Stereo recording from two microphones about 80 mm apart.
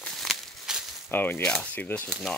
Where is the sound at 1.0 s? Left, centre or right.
Left.